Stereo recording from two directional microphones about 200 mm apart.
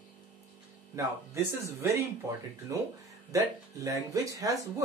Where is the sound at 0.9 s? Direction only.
15° right (ahead or behind).